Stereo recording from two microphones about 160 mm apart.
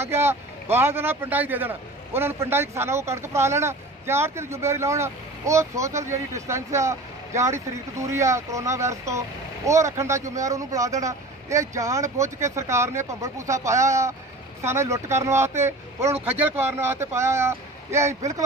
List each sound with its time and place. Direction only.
0.0 s speech: 15° right (ahead or behind)